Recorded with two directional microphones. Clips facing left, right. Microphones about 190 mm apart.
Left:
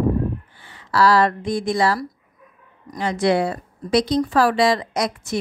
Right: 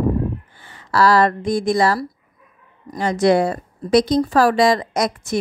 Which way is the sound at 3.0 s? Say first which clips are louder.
Right 3 dB; 45° right (ahead or behind).